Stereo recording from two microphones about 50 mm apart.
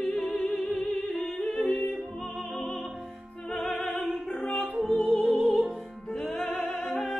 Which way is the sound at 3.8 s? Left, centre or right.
Left.